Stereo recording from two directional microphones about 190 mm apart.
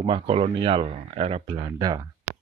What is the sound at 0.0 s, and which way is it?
Speech, 30° right (ahead or behind).